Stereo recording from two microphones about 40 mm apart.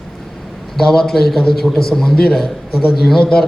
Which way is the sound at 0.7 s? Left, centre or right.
Centre.